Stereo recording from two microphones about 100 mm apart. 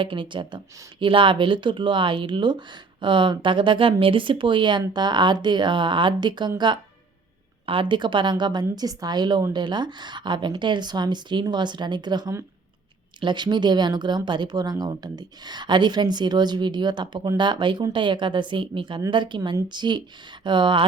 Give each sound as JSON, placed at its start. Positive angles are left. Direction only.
{"t": 0.0, "sound": "speech", "side_deg": -55}
{"t": 7.7, "sound": "speech", "side_deg": -55}